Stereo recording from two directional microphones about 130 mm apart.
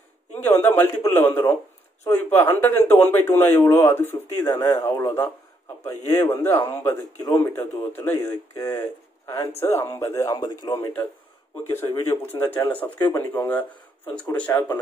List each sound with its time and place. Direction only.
0.4 s a man's voice: 15° left (ahead or behind)
12.1 s speech: 15° left (ahead or behind)